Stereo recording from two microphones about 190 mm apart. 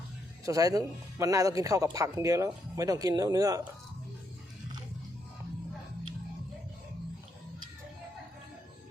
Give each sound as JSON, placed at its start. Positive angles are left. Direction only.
{"t": 0.4, "sound": "speech", "side_deg": -20}